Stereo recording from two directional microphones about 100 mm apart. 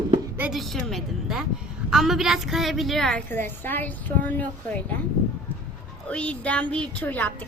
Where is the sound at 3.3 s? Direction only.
20° left (ahead or behind).